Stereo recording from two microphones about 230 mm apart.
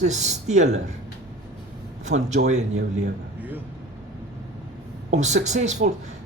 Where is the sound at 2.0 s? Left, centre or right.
Right.